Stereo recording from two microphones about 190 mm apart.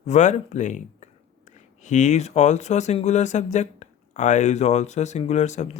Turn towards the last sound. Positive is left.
turn(degrees=40)  # may be behind; listen again after turning